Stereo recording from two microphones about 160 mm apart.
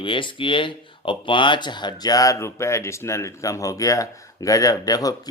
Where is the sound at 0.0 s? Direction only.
30° left (ahead or behind).